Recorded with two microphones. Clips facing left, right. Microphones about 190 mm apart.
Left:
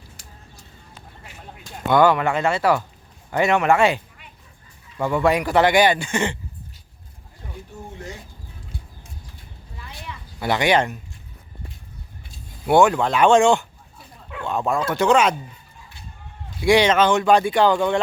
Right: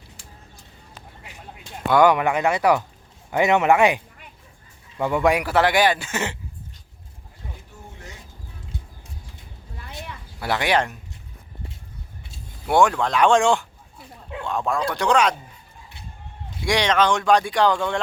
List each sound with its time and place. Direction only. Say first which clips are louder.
1.9 s speech: even; 15° right (ahead or behind)
10.4 s speech: left 3 dB; centre (ahead or behind)
12.6 s speech: left 3 dB; centre (ahead or behind)
16.6 s speech: left 4 dB; 5° left (ahead or behind)